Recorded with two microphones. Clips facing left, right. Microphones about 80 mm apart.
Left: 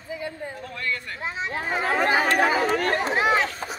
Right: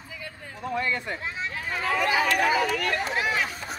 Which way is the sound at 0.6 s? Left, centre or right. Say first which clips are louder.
Right 5 dB; centre.